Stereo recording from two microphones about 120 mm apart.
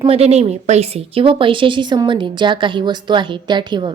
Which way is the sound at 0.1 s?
60° right (ahead or behind).